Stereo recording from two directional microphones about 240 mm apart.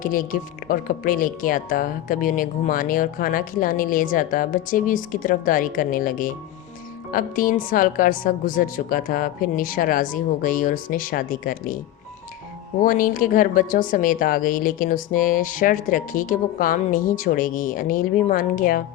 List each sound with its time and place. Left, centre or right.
0.0 s speech: left
12.8 s speech: left